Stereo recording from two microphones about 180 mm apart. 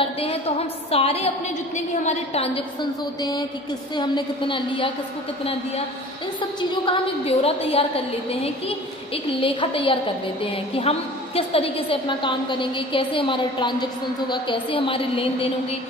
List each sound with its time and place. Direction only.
0.0 s a woman's voice: 30° left (ahead or behind)
6.7 s a woman's voice: 30° left (ahead or behind)